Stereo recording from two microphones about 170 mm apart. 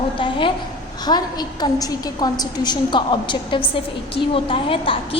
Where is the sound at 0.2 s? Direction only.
30° left (ahead or behind).